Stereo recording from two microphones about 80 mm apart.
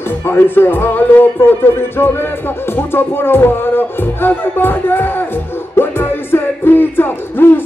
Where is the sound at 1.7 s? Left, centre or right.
Left.